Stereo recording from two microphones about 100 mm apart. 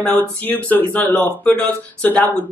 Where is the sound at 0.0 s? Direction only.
15° left (ahead or behind).